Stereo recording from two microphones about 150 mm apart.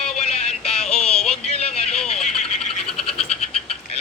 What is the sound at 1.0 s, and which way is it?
Speech, 45° left (ahead or behind).